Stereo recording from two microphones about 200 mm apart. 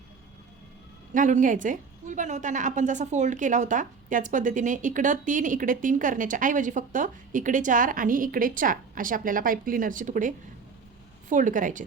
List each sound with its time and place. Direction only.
1.1 s a woman's voice: 40° right (ahead or behind)